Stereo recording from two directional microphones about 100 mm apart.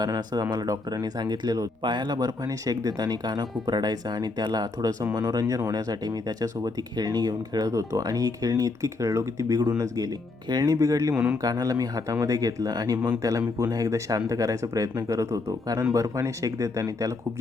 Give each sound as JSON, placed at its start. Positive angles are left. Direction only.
{"t": 0.0, "sound": "speech", "side_deg": -45}
{"t": 11.1, "sound": "a man's voice", "side_deg": -10}
{"t": 11.4, "sound": "speech", "side_deg": -40}